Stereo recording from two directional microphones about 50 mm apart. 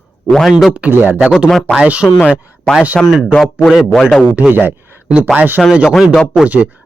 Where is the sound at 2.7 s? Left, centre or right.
Centre.